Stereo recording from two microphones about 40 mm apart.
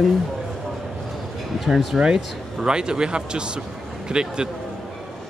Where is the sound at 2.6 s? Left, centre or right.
Right.